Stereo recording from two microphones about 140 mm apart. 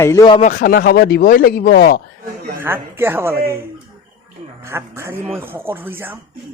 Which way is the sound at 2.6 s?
15° right (ahead or behind).